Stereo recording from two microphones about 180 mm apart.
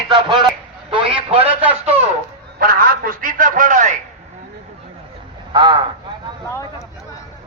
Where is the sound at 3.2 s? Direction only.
45° right (ahead or behind).